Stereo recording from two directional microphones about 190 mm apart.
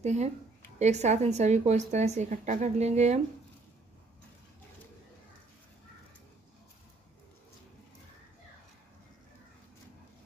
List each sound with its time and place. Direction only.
0.0 s a woman's voice: 35° right (ahead or behind)